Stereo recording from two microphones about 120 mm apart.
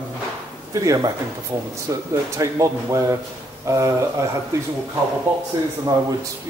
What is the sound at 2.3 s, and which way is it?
A man's voice, 25° right (ahead or behind).